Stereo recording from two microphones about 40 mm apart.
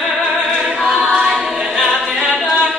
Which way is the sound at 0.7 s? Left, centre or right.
Centre.